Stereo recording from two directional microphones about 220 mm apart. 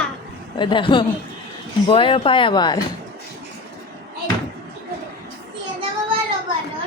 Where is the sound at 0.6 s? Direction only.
20° left (ahead or behind).